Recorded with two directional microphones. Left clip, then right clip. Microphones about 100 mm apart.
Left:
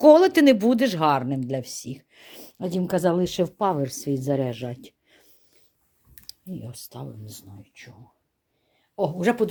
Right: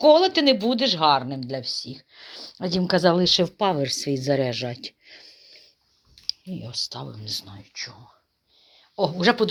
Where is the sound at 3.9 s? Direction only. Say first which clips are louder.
Right 2 dB; 35° left (ahead or behind).